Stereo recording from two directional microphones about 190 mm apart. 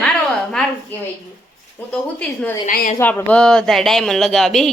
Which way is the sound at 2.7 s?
45° left (ahead or behind).